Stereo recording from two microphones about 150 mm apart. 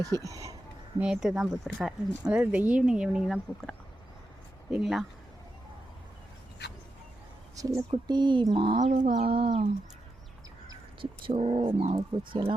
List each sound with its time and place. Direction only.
0.0 s speech: 25° right (ahead or behind)
0.9 s speech: 5° right (ahead or behind)
7.9 s speech: 30° right (ahead or behind)
8.8 s chicken: 55° right (ahead or behind)
9.2 s speech: 40° right (ahead or behind)
11.0 s speech: 40° right (ahead or behind)